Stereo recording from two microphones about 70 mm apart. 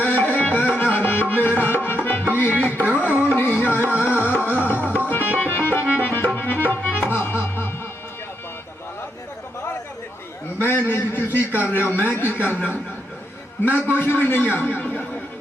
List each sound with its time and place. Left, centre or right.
0.0 s music: left
10.6 s a man's voice: left
13.7 s a man's voice: left